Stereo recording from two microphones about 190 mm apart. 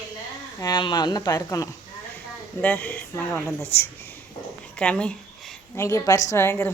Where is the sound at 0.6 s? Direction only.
20° left (ahead or behind).